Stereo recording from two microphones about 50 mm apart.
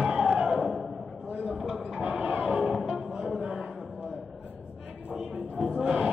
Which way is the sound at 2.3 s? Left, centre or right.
Centre.